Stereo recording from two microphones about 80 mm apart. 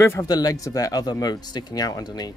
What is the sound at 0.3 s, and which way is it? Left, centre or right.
Speech, left.